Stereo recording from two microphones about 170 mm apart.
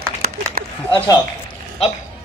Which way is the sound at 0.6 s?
55° right (ahead or behind).